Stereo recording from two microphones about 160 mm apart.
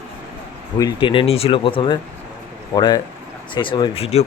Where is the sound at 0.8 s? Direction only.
25° left (ahead or behind).